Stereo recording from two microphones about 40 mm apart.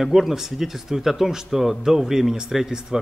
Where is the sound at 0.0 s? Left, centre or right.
Centre.